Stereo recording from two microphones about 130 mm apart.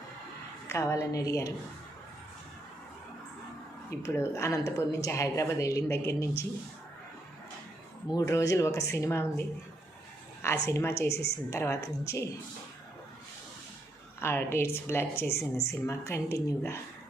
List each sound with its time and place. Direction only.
0.7 s a woman's voice: 20° left (ahead or behind)
3.8 s a woman's voice: 20° left (ahead or behind)
8.0 s a woman's voice: 25° left (ahead or behind)
10.4 s a woman's voice: 20° left (ahead or behind)
14.2 s a woman's voice: 20° left (ahead or behind)